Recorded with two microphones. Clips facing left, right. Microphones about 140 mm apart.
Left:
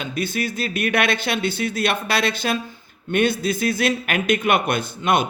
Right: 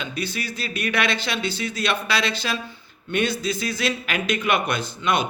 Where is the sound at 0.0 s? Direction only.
50° left (ahead or behind).